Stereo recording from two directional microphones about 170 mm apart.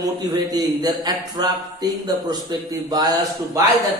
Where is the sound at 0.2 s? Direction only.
25° right (ahead or behind).